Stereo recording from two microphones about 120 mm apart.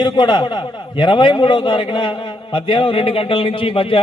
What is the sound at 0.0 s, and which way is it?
A man's voice, 40° left (ahead or behind).